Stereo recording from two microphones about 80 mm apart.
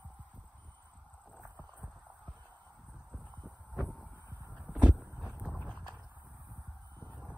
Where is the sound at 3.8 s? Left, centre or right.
Centre.